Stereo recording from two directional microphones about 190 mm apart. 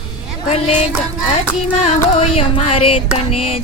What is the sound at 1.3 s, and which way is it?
Music, 35° left (ahead or behind).